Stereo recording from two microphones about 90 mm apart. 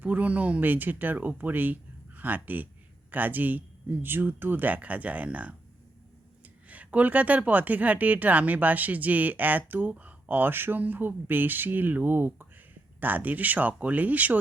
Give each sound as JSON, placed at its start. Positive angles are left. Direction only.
{"t": 0.0, "sound": "speech", "side_deg": -15}
{"t": 6.7, "sound": "speech", "side_deg": -15}